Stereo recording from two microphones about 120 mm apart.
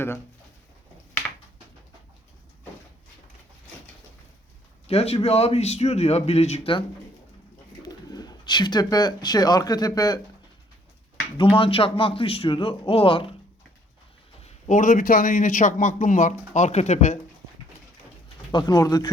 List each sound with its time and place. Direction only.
4.9 s speech: 55° left (ahead or behind)
7.8 s speech: 35° left (ahead or behind)
11.5 s speech: 50° left (ahead or behind)
14.4 s a man's voice: 90° left
18.5 s speech: 35° left (ahead or behind)